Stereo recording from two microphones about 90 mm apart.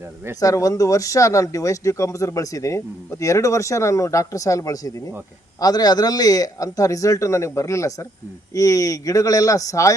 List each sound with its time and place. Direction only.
0.3 s speech: 40° left (ahead or behind)